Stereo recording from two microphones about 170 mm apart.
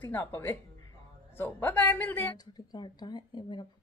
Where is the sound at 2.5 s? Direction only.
25° left (ahead or behind).